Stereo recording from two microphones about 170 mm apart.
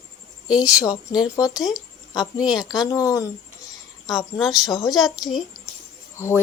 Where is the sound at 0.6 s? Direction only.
20° left (ahead or behind).